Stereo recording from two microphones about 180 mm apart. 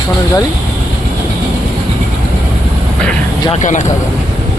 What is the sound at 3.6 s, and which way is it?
Speech, 40° left (ahead or behind).